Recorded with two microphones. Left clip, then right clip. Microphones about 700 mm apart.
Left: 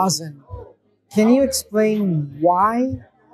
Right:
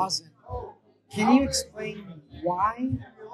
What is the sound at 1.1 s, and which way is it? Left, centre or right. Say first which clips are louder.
Speech: left 6 dB; left.